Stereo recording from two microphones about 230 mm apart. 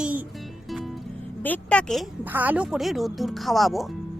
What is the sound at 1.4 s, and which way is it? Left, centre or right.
Speech, centre.